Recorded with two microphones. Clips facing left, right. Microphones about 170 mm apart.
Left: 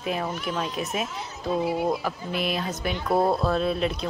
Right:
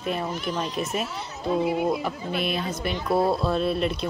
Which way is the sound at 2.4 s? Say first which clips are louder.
Left 2 dB; centre (ahead or behind).